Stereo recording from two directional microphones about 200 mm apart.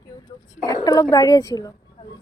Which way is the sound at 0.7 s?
20° left (ahead or behind).